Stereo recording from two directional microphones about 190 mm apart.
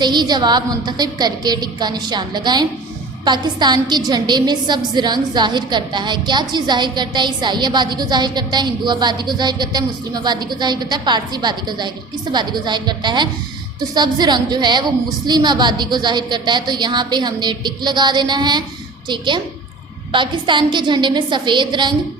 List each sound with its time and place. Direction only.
0.0 s a woman's voice: 25° right (ahead or behind)